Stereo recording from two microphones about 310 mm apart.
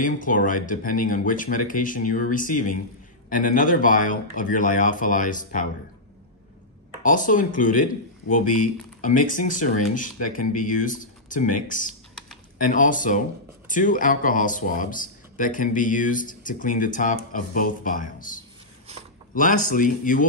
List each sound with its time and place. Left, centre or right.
0.0 s speech: left
7.0 s speech: left
19.3 s speech: left